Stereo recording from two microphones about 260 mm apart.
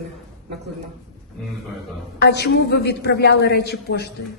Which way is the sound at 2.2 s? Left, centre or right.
Left.